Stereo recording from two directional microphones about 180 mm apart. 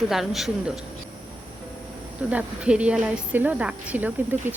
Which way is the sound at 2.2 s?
5° right (ahead or behind).